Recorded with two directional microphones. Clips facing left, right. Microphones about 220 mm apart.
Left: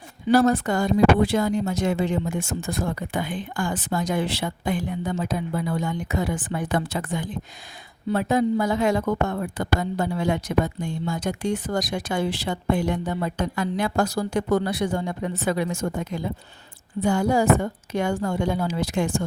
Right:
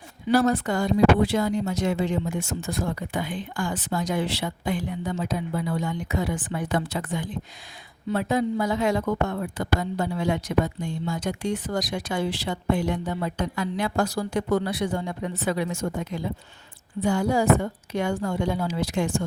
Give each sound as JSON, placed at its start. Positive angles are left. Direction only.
{"t": 0.3, "sound": "a woman's voice", "side_deg": 45}